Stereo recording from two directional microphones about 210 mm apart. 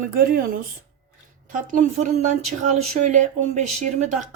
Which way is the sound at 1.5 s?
35° right (ahead or behind).